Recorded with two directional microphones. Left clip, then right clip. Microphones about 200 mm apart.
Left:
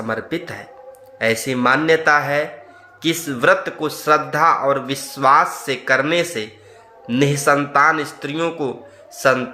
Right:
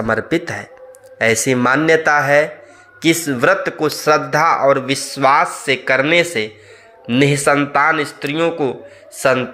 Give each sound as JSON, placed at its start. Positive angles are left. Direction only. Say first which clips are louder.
{"t": 0.0, "sound": "a man's voice", "louder": "right 6 dB", "side_deg": -30}